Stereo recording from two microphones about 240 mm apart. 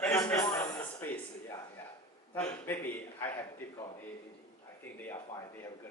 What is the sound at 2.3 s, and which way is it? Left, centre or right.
A man's voice, centre.